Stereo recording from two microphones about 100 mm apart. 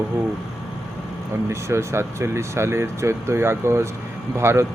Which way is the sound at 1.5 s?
25° right (ahead or behind).